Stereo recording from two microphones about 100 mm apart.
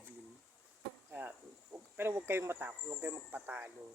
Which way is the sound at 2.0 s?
25° right (ahead or behind).